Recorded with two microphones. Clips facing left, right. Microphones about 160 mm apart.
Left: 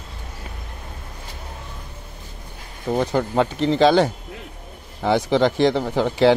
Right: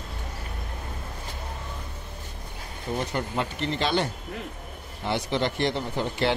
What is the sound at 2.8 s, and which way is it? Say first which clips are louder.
Speech: left 8 dB; 75° left (ahead or behind).